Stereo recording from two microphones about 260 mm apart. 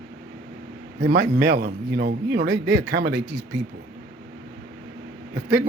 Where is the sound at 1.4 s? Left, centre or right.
Right.